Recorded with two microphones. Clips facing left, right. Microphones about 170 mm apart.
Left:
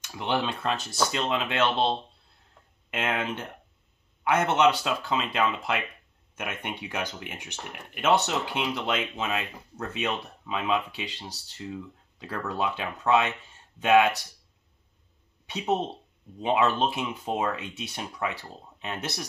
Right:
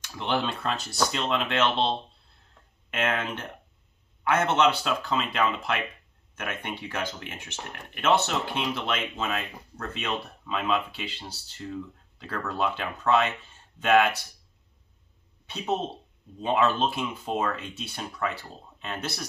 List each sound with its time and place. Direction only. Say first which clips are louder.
0.2 s speech: even; 10° left (ahead or behind)
2.9 s speech: right 1 dB; 15° left (ahead or behind)
16.3 s speech: even; 15° left (ahead or behind)